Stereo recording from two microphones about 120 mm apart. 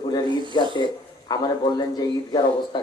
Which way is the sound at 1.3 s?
35° left (ahead or behind).